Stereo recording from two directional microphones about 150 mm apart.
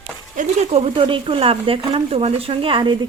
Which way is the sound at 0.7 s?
40° right (ahead or behind).